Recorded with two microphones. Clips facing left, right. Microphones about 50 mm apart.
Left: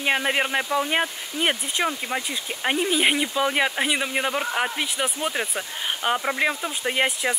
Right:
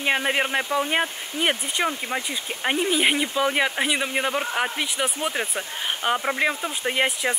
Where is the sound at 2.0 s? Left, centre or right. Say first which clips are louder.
Even; centre.